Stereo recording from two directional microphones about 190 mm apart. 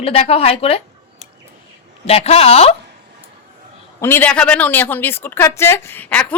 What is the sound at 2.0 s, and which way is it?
Speech, 30° left (ahead or behind).